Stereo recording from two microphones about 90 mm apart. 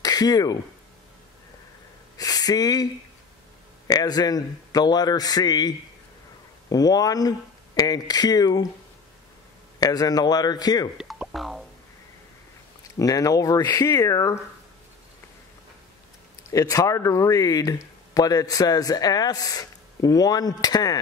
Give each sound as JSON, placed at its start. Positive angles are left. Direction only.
{"t": 0.0, "sound": "speech", "side_deg": 45}
{"t": 2.1, "sound": "a sound", "side_deg": 45}
{"t": 3.8, "sound": "a man's voice", "side_deg": 45}
{"t": 9.8, "sound": "a man's voice", "side_deg": 45}
{"t": 11.0, "sound": "music", "side_deg": -5}
{"t": 13.0, "sound": "speech", "side_deg": 40}
{"t": 16.4, "sound": "speech", "side_deg": 40}